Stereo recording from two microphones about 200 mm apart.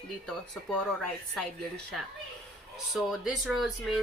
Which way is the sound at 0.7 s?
5° left (ahead or behind).